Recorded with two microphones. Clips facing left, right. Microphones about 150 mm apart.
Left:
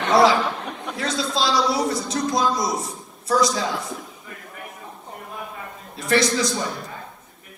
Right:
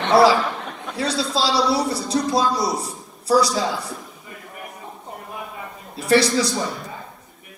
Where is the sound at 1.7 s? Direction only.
30° right (ahead or behind).